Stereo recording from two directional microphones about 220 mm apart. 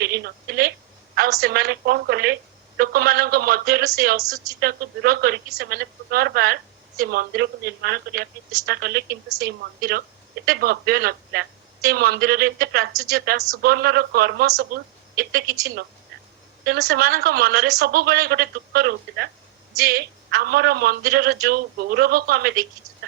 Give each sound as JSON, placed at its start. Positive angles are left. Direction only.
{"t": 0.0, "sound": "telephone", "side_deg": -45}
{"t": 1.1, "sound": "a woman's voice", "side_deg": -45}
{"t": 15.4, "sound": "a woman's voice", "side_deg": -15}
{"t": 16.6, "sound": "a woman's voice", "side_deg": -45}